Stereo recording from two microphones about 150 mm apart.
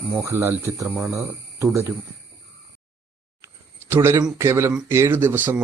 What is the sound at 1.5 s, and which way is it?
Speech, 15° right (ahead or behind).